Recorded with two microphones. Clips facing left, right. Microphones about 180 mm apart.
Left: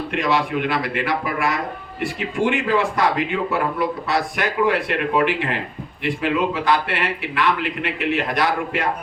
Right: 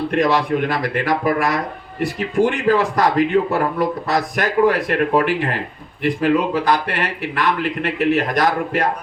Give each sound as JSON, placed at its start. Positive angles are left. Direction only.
{"t": 0.1, "sound": "a man's voice", "side_deg": -40}